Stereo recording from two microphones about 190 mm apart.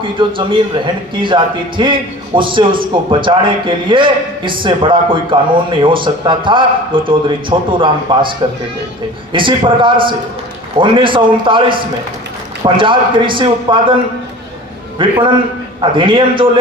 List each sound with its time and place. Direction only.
0.0 s a man's voice: 25° right (ahead or behind)
9.3 s a man's voice: 25° right (ahead or behind)
15.0 s a man's voice: 25° right (ahead or behind)